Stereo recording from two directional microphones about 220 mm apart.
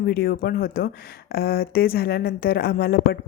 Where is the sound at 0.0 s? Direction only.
45° left (ahead or behind).